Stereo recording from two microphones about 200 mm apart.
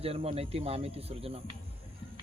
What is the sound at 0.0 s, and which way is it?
Speech, 30° right (ahead or behind).